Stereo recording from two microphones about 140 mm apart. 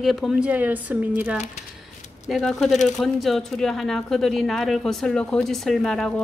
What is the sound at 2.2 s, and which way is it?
Speech, centre (ahead or behind).